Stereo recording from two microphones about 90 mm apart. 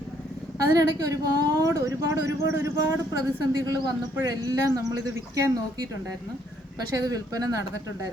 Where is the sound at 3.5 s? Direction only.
45° right (ahead or behind).